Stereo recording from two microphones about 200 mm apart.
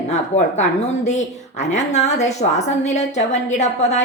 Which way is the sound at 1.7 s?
35° left (ahead or behind).